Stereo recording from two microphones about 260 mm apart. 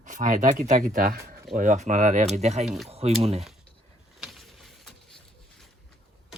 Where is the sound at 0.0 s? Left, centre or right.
Right.